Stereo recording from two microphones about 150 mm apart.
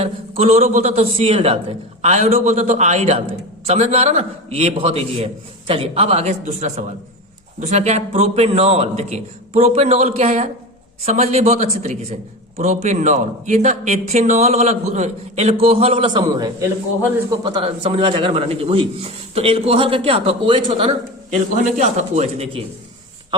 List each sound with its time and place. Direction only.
0.0 s a man's voice: 45° right (ahead or behind)
21.6 s a man's voice: 50° right (ahead or behind)